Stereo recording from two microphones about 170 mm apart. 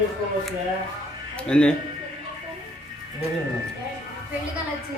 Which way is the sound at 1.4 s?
5° left (ahead or behind).